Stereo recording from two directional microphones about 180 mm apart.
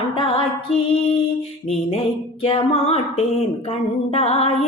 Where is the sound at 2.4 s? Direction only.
30° left (ahead or behind).